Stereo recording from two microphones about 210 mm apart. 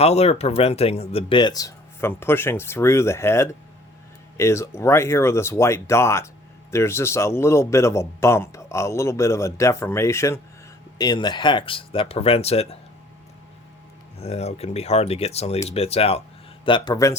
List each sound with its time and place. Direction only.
0.0 s speech: 30° left (ahead or behind)
14.2 s speech: 30° left (ahead or behind)